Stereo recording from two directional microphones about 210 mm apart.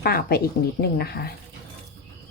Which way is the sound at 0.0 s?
45° left (ahead or behind).